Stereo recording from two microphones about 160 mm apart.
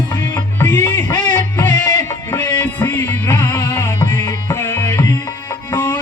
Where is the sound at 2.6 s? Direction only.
15° left (ahead or behind).